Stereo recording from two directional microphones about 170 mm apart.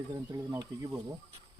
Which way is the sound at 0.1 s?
20° right (ahead or behind).